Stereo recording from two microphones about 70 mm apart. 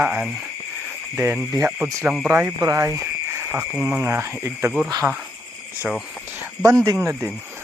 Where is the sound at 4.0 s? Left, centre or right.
Right.